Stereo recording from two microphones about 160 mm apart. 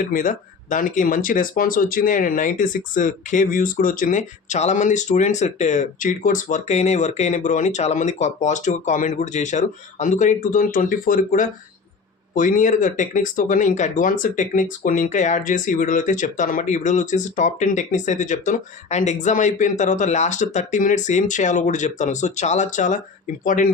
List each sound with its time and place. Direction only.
0.0 s speech: 55° left (ahead or behind)